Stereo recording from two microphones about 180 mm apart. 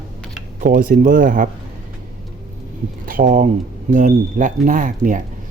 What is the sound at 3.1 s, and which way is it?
Speech, 45° right (ahead or behind).